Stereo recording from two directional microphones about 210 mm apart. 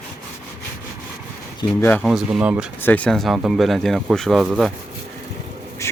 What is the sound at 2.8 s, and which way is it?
Speech, 5° left (ahead or behind).